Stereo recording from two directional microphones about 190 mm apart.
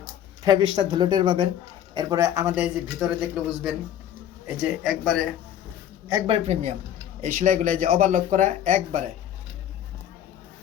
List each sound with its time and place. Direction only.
0.7 s speech: 25° right (ahead or behind); by 5.2 s centre (ahead or behind)
6.1 s speech: 20° right (ahead or behind)
6.3 s speech: 35° right (ahead or behind)